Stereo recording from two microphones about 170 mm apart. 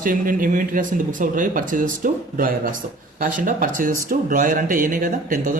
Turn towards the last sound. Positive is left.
turn(degrees=-55)  # may be behind; listen again after turning